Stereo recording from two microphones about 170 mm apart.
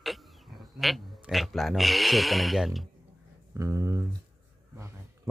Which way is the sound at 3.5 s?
20° right (ahead or behind).